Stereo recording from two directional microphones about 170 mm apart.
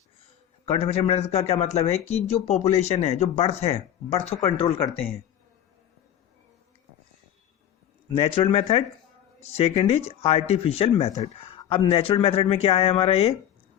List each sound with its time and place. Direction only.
0.2 s a man's voice: 35° left (ahead or behind)
8.1 s a man's voice: 35° left (ahead or behind)